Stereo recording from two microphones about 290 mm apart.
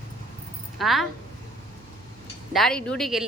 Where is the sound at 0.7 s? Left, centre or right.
Centre.